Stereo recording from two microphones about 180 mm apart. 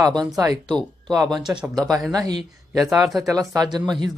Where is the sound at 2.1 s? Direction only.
20° right (ahead or behind).